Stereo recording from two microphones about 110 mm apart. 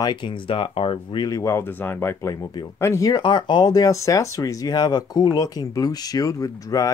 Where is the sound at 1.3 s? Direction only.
30° left (ahead or behind).